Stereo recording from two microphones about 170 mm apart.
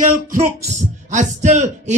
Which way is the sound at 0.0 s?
50° right (ahead or behind).